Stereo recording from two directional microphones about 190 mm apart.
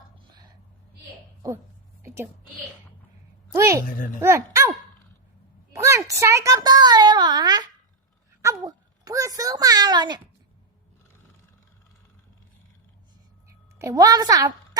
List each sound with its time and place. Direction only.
2.0 s a sound: 15° right (ahead or behind)
3.5 s a woman's voice: 15° right (ahead or behind)
3.8 s a child's voice: 45° left (ahead or behind)
4.2 s speech: 15° right (ahead or behind)
5.7 s a child's voice: 15° right (ahead or behind)
13.7 s a woman's voice: 15° right (ahead or behind)